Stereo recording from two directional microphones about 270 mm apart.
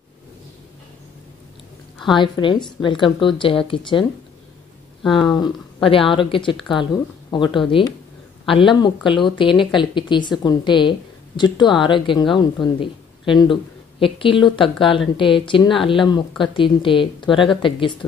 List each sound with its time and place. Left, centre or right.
2.0 s a woman's voice: centre
5.3 s a woman's voice: centre